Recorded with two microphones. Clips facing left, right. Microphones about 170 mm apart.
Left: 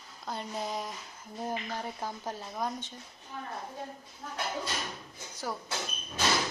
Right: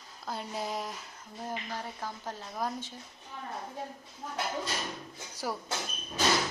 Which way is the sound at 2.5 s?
Centre (ahead or behind).